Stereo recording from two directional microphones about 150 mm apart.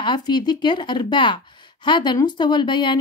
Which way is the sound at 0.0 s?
30° left (ahead or behind).